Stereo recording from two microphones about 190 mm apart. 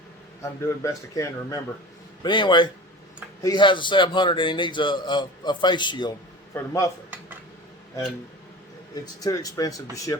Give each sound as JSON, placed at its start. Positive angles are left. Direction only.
{"t": 0.4, "sound": "a man's voice", "side_deg": 15}
{"t": 9.2, "sound": "a man's voice", "side_deg": 20}